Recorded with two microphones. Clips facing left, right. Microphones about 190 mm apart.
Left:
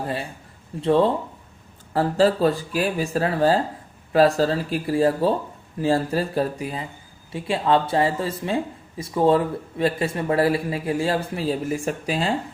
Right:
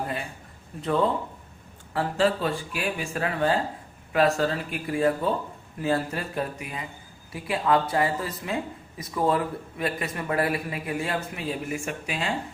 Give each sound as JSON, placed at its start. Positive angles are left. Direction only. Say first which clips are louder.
{"t": 0.8, "sound": "speech", "louder": "left 6 dB", "side_deg": 30}